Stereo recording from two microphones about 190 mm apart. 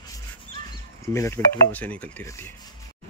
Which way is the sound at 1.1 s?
10° left (ahead or behind).